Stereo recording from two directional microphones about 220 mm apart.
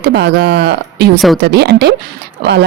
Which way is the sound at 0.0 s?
50° right (ahead or behind).